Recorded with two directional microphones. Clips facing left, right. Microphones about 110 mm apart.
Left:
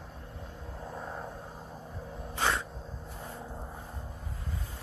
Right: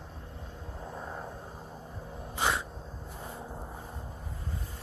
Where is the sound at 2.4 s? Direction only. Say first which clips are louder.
Even; 10° right (ahead or behind).